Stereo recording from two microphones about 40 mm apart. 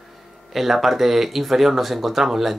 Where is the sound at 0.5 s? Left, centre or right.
Centre.